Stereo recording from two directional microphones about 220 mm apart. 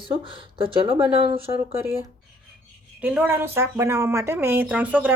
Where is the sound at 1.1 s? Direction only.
25° right (ahead or behind).